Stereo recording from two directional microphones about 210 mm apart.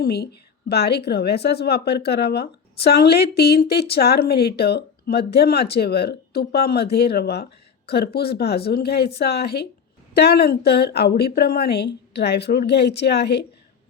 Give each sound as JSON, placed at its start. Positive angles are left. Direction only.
{"t": 0.0, "sound": "a woman's voice", "side_deg": 50}